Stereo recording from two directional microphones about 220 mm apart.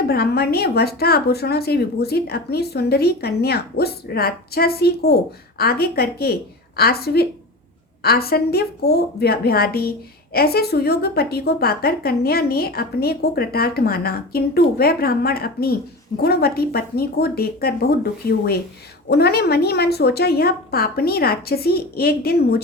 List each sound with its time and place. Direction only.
0.1 s a woman's voice: 45° left (ahead or behind)